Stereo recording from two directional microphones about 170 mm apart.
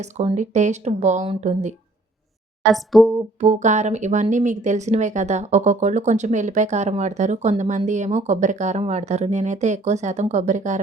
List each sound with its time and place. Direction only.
0.0 s a woman's voice: 40° right (ahead or behind)
2.7 s speech: centre (ahead or behind)
3.4 s a woman's voice: 45° right (ahead or behind)